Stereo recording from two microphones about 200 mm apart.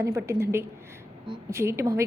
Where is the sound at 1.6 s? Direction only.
15° right (ahead or behind).